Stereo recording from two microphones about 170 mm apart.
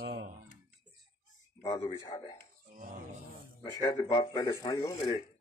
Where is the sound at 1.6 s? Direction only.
30° left (ahead or behind).